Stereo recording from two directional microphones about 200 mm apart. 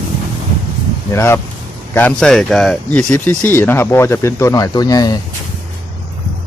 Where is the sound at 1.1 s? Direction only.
10° left (ahead or behind).